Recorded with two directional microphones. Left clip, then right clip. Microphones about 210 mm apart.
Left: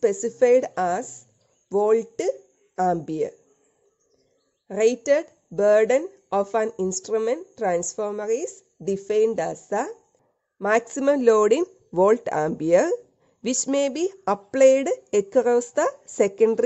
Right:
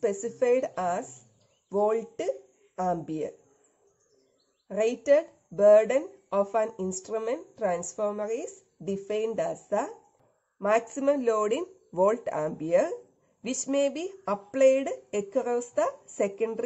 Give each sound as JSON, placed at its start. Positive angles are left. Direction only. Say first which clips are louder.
{"t": 0.0, "sound": "speech", "louder": "left 7 dB", "side_deg": 40}
{"t": 4.6, "sound": "speech", "louder": "left 4 dB", "side_deg": 45}